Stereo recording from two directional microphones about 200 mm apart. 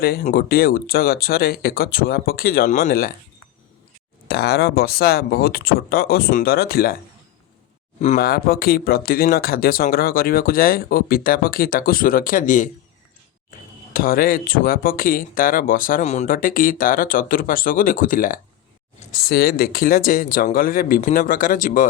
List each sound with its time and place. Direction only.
0.0 s speech: 50° left (ahead or behind)
4.3 s speech: 50° left (ahead or behind)
8.0 s speech: 45° left (ahead or behind)
13.9 s speech: 45° left (ahead or behind)